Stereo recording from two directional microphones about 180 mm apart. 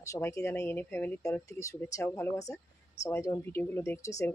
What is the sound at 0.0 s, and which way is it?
Speech, 15° left (ahead or behind).